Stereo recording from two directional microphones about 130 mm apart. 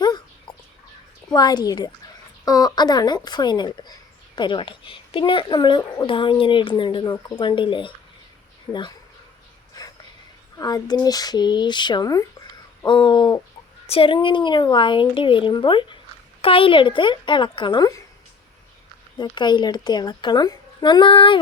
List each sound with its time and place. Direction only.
0.0 s a sound: 35° left (ahead or behind)
1.3 s speech: 30° left (ahead or behind)
10.6 s speech: 30° left (ahead or behind)
13.8 s speech: 45° left (ahead or behind); by 18.0 s 30° left (ahead or behind)
19.1 s speech: 35° left (ahead or behind)